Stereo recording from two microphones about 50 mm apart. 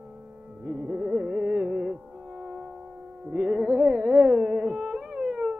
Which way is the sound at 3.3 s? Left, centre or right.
Centre.